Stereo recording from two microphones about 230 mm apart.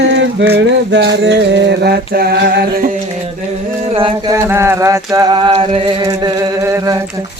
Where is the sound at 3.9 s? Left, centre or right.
Right.